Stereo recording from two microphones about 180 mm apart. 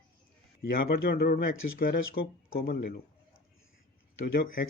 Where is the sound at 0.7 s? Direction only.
55° left (ahead or behind).